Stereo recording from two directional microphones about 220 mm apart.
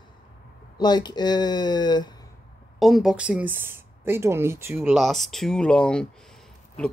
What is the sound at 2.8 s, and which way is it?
Speech, centre (ahead or behind).